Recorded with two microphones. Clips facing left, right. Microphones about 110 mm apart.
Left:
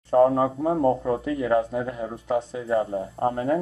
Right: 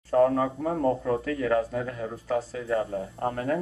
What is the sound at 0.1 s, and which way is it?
Speech, 20° left (ahead or behind).